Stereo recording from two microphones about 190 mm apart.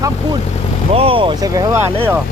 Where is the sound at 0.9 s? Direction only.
30° right (ahead or behind).